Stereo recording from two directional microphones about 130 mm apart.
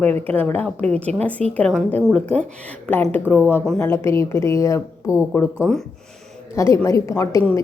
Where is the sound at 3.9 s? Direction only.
20° left (ahead or behind).